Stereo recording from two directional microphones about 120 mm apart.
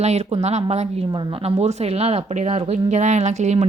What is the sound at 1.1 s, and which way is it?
A woman's voice, 45° right (ahead or behind).